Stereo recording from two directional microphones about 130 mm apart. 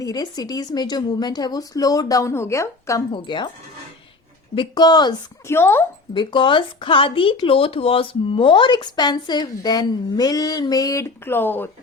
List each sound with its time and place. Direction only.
0.0 s speech: 30° left (ahead or behind)
3.1 s speech: 40° left (ahead or behind)
4.5 s speech: 35° left (ahead or behind)
5.5 s speech: 20° left (ahead or behind)
6.1 s speech: 40° left (ahead or behind); by 11.7 s 15° left (ahead or behind)